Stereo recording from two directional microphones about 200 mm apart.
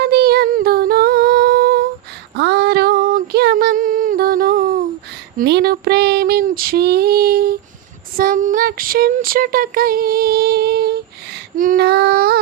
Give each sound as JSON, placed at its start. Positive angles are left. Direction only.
{"t": 0.0, "sound": "humming", "side_deg": -50}
{"t": 2.3, "sound": "female singing", "side_deg": -55}
{"t": 5.4, "sound": "a sound", "side_deg": -55}